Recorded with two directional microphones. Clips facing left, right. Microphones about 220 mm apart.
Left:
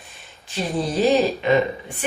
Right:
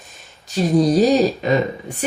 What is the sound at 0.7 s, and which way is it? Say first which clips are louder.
Speech: right 4 dB; 40° right (ahead or behind).